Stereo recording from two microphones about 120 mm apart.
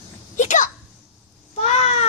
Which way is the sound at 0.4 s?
90° left.